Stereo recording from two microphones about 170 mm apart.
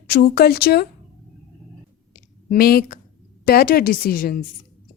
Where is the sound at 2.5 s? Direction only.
65° left (ahead or behind).